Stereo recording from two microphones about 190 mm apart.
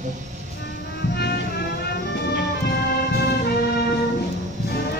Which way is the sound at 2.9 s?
55° left (ahead or behind).